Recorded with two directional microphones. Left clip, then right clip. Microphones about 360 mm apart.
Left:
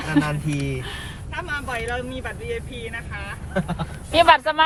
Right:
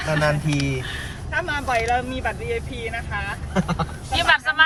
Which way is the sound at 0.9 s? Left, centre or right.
Centre.